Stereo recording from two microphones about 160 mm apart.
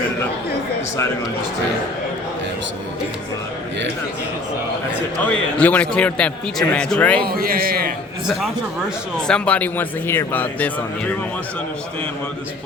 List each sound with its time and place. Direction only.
5.2 s speech: 10° left (ahead or behind)
7.3 s a man's voice: 65° right (ahead or behind)
8.3 s speech: centre (ahead or behind)